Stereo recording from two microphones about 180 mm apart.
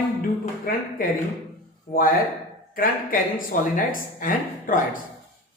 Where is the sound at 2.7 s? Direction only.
55° left (ahead or behind).